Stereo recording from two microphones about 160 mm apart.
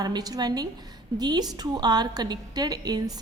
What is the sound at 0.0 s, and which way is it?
A woman's voice, 25° right (ahead or behind).